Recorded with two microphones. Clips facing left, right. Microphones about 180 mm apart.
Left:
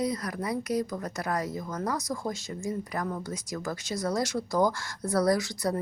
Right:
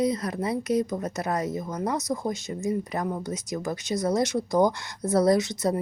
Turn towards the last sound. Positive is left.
turn(degrees=-20)  # may be behind; listen again after turning